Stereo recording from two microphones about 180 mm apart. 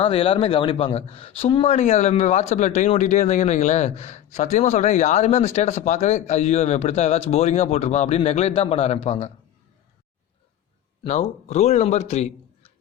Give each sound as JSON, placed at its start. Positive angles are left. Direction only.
{"t": 0.0, "sound": "speech", "side_deg": 30}
{"t": 11.4, "sound": "a man's voice", "side_deg": 35}